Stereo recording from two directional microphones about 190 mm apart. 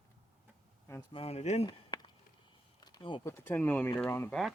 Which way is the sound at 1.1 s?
30° left (ahead or behind).